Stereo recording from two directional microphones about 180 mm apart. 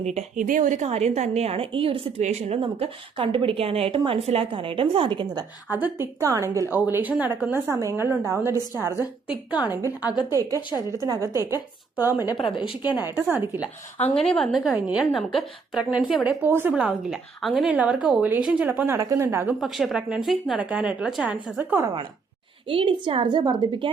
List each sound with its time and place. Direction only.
0.0 s a woman's voice: 40° right (ahead or behind); by 5.5 s 25° right (ahead or behind)
5.7 s a woman's voice: 10° right (ahead or behind)
10.0 s speech: 20° left (ahead or behind)
10.2 s a woman's voice: 20° right (ahead or behind)
12.2 s speech: 25° left (ahead or behind)
13.3 s a woman's voice: 10° right (ahead or behind)
14.2 s a woman's voice: 5° left (ahead or behind); by 19.5 s 15° right (ahead or behind)
19.5 s a woman's voice: centre (ahead or behind)
22.6 s a woman's voice: 30° right (ahead or behind)